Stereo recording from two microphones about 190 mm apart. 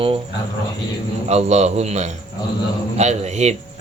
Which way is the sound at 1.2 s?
35° right (ahead or behind).